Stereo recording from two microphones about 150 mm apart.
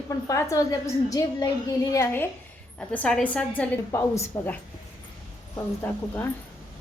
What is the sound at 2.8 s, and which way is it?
A woman's voice, 5° left (ahead or behind).